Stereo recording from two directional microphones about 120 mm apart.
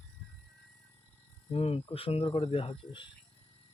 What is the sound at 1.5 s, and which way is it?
Speech, 55° left (ahead or behind).